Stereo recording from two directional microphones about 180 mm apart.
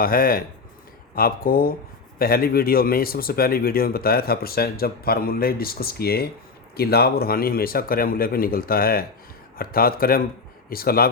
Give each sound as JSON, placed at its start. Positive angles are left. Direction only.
{"t": 0.0, "sound": "speech", "side_deg": 55}